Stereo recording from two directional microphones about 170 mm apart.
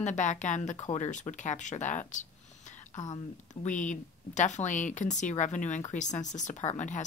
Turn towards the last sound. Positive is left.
turn(degrees=45)  # may be behind; listen again after turning